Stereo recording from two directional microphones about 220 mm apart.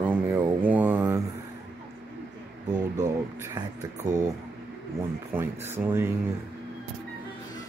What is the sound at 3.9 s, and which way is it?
Speech, 35° right (ahead or behind).